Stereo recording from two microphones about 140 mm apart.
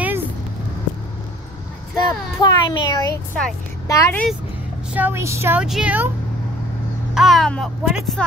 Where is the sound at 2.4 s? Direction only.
30° left (ahead or behind).